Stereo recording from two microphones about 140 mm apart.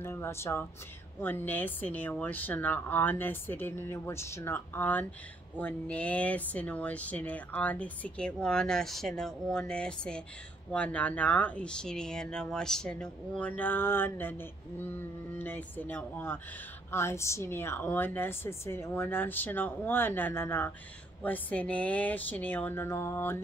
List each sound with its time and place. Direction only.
0.0 s speech: 15° left (ahead or behind)